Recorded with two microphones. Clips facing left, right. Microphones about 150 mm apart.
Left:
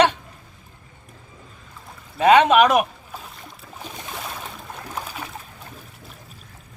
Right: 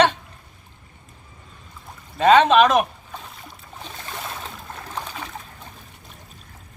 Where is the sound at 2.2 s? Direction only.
10° left (ahead or behind).